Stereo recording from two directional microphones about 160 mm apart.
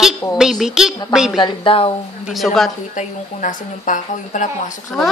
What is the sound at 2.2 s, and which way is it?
Speech, centre (ahead or behind).